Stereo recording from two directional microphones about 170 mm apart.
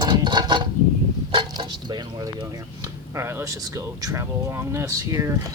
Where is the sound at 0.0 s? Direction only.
25° right (ahead or behind).